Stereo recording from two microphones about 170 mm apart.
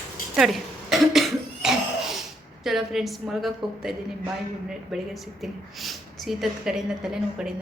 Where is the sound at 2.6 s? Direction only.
Centre (ahead or behind).